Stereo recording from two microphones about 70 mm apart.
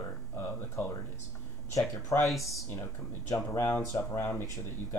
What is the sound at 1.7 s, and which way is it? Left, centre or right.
Speech, left.